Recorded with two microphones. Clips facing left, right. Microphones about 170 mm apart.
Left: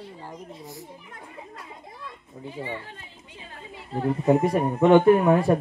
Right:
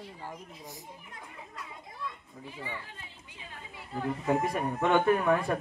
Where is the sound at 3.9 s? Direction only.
30° left (ahead or behind).